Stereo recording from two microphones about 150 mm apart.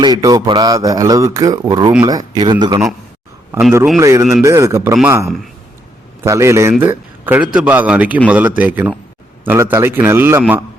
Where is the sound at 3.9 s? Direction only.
20° right (ahead or behind).